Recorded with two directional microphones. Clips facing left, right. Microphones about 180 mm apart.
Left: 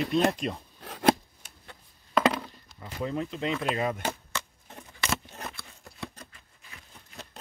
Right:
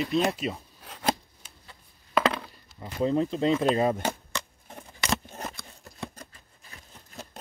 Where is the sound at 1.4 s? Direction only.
60° left (ahead or behind).